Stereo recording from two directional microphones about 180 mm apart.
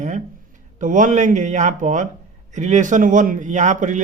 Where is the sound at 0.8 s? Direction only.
45° right (ahead or behind).